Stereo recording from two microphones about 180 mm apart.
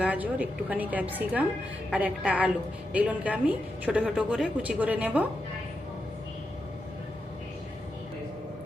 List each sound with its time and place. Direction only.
0.0 s a woman's voice: 10° right (ahead or behind)